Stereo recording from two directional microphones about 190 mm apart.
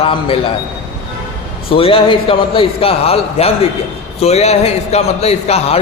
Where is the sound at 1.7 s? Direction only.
30° left (ahead or behind).